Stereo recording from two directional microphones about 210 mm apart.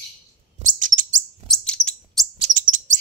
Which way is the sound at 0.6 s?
40° right (ahead or behind).